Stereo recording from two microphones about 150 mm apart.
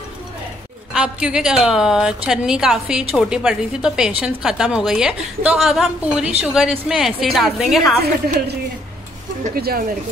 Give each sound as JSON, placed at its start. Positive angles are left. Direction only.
{"t": 0.9, "sound": "a woman's voice", "side_deg": -5}
{"t": 8.0, "sound": "a woman's voice", "side_deg": -90}
{"t": 9.6, "sound": "a woman's voice", "side_deg": -90}